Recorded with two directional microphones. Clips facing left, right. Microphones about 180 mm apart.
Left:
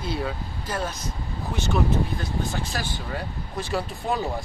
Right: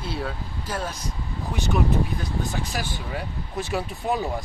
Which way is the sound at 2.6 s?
15° right (ahead or behind).